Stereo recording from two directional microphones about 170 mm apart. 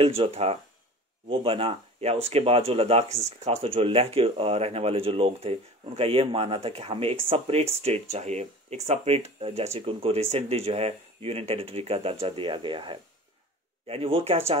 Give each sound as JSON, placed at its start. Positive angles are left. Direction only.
{"t": 0.0, "sound": "speech", "side_deg": -35}